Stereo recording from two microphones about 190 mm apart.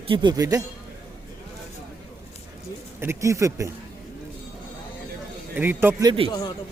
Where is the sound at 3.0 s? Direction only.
15° right (ahead or behind).